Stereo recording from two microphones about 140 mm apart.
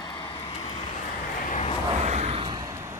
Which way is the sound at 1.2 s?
65° left (ahead or behind).